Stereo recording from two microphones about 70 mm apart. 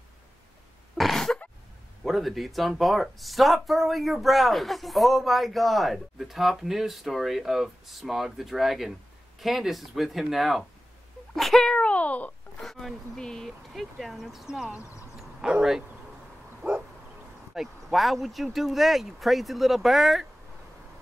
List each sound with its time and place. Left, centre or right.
0.9 s a sound: centre
2.0 s speech: centre
11.3 s a sound: centre; by 12.4 s left
12.5 s speech: centre
16.6 s bow-wow: right
17.6 s speech: centre